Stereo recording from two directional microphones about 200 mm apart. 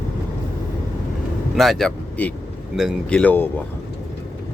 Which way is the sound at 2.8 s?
Centre (ahead or behind).